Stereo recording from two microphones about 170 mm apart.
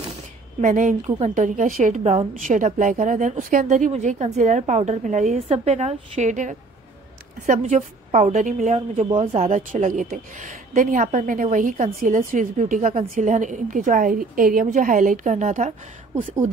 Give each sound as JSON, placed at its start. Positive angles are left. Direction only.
{"t": 0.6, "sound": "a woman's voice", "side_deg": -50}